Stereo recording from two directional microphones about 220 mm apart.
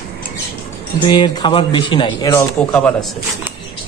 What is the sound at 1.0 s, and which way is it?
A man's voice, 20° left (ahead or behind).